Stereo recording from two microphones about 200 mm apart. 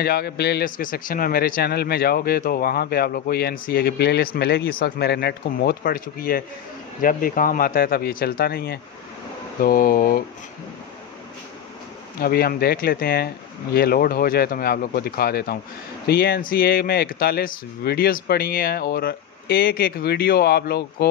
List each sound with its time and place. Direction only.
0.0 s speech: 50° left (ahead or behind)
12.2 s speech: 50° left (ahead or behind)